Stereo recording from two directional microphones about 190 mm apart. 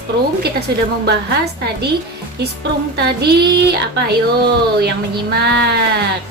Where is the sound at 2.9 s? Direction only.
55° right (ahead or behind).